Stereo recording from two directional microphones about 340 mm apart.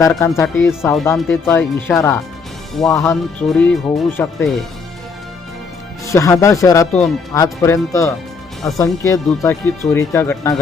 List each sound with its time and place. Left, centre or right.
0.0 s speech: centre
6.1 s speech: centre